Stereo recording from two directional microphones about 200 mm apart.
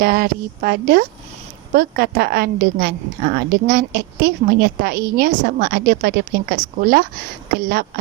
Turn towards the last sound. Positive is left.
turn(degrees=-50)  # may be behind; listen again after turning